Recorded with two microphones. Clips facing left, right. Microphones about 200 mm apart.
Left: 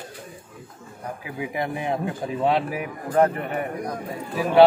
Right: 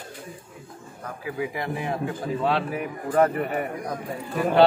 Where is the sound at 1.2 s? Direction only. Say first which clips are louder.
Even; 20° left (ahead or behind).